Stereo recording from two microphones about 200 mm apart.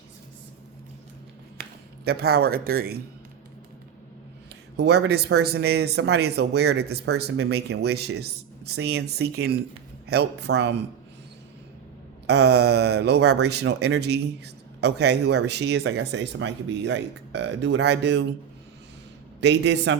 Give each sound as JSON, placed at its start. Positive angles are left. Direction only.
{"t": 2.0, "sound": "speech", "side_deg": -50}
{"t": 4.8, "sound": "speech", "side_deg": -55}
{"t": 12.2, "sound": "speech", "side_deg": -55}
{"t": 19.4, "sound": "speech", "side_deg": -60}